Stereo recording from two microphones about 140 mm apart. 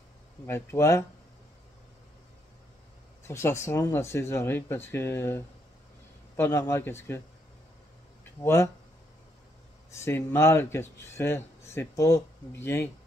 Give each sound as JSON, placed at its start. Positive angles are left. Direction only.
{"t": 0.5, "sound": "speech", "side_deg": 20}
{"t": 3.3, "sound": "speech", "side_deg": 20}
{"t": 8.4, "sound": "speech", "side_deg": 20}
{"t": 9.8, "sound": "speech", "side_deg": 20}